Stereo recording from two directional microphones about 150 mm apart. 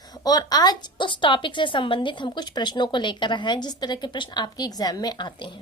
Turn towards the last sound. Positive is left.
turn(degrees=25)  # may be behind; listen again after turning